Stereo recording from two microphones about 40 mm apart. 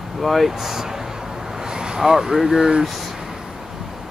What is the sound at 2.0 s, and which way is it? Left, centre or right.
Speech, centre.